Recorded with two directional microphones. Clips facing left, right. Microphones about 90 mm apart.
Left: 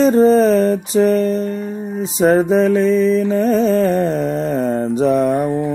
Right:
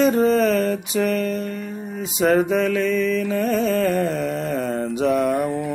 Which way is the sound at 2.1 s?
35° left (ahead or behind).